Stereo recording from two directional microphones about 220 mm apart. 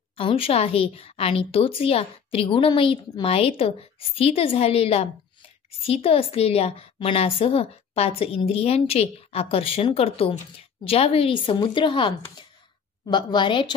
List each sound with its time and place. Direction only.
0.2 s a woman's voice: 25° left (ahead or behind)